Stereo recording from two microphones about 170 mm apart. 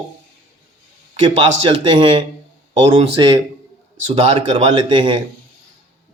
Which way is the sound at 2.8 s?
40° right (ahead or behind).